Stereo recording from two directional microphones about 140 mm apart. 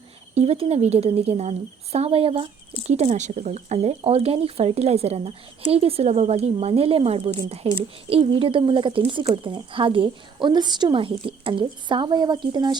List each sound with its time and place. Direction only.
0.3 s a woman's voice: 45° right (ahead or behind)